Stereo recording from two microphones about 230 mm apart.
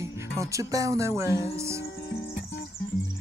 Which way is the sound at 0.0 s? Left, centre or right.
Centre.